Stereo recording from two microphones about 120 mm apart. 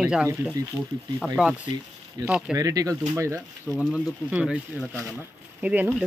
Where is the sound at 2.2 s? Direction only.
35° right (ahead or behind).